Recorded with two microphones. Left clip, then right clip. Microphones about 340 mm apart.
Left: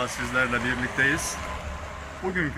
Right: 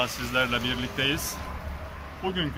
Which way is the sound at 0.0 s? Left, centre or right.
Centre.